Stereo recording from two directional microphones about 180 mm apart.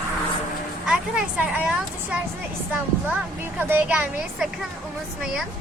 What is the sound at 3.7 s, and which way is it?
Speech, 10° right (ahead or behind).